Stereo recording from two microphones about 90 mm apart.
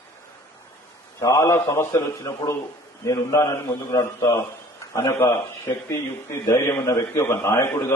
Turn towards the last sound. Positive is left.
turn(degrees=25)  # may be behind; listen again after turning